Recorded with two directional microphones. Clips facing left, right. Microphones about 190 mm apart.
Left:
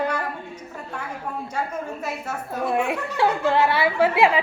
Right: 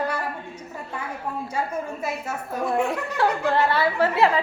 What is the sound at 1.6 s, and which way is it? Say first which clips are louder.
Speech: right 1 dB; 10° right (ahead or behind).